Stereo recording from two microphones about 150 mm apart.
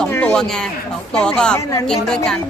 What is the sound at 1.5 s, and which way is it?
Speech, 20° left (ahead or behind).